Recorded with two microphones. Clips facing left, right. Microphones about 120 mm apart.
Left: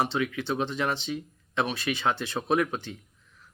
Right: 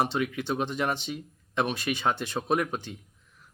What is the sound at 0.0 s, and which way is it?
Speech, 45° right (ahead or behind).